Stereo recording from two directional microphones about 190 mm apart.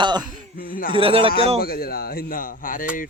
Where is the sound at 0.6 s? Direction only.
45° left (ahead or behind).